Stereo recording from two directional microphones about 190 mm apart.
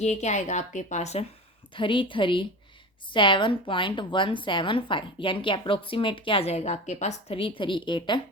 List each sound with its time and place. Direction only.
0.0 s a woman's voice: 35° left (ahead or behind)
1.7 s a woman's voice: 25° left (ahead or behind)